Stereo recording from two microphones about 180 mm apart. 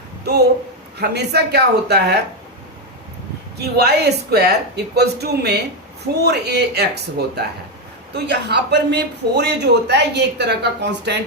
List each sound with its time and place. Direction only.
0.9 s speech: 65° right (ahead or behind)
3.6 s speech: 65° right (ahead or behind)